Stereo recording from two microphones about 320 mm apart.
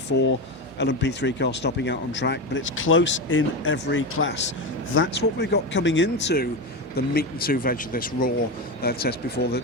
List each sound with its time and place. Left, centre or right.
0.8 s speech: left